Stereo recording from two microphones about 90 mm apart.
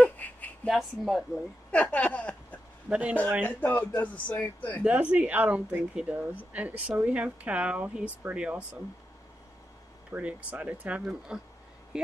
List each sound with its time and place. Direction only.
0.0 s a sound: 15° left (ahead or behind)
0.7 s speech: centre (ahead or behind)
1.7 s a sound: 15° left (ahead or behind)
2.9 s speech: 15° right (ahead or behind)
3.4 s speech: 20° left (ahead or behind)
4.8 s speech: 15° right (ahead or behind)
10.1 s speech: 15° right (ahead or behind)